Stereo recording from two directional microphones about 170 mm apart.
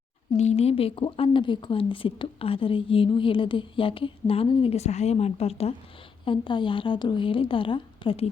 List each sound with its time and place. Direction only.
0.3 s a woman's voice: 40° left (ahead or behind)